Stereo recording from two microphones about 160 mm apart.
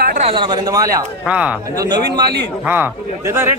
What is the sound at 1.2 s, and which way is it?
Speech, 5° right (ahead or behind).